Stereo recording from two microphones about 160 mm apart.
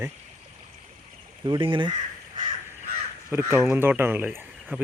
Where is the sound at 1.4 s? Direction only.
30° right (ahead or behind).